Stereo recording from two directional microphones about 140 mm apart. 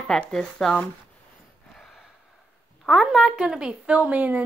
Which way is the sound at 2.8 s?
Centre (ahead or behind).